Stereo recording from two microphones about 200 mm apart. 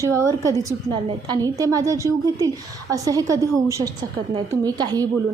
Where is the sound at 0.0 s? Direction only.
15° right (ahead or behind).